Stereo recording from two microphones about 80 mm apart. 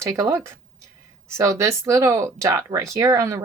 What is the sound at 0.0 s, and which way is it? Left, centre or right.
Speech, right.